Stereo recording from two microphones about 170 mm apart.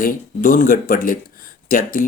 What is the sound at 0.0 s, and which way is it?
Speech, 55° left (ahead or behind).